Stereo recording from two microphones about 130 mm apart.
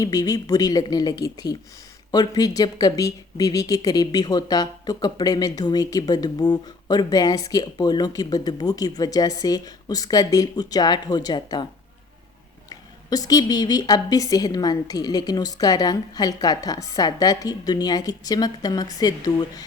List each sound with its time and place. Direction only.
0.0 s speech: 30° left (ahead or behind)
13.1 s speech: 30° left (ahead or behind)